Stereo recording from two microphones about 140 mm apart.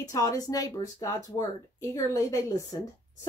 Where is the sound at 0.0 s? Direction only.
25° left (ahead or behind).